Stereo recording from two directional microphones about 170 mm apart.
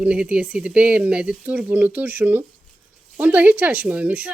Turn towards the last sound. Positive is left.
turn(degrees=-10)  # may be behind; listen again after turning